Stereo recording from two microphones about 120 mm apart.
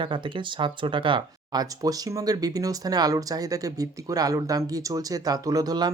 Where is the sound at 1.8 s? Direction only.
30° right (ahead or behind).